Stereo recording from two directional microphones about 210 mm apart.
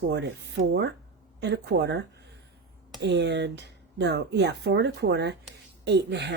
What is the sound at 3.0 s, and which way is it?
Speech, 55° right (ahead or behind).